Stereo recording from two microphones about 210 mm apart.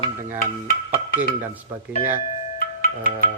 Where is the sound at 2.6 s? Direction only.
40° left (ahead or behind).